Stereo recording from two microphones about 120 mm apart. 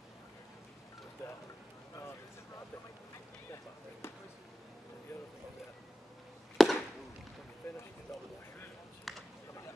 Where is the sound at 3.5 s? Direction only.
20° left (ahead or behind).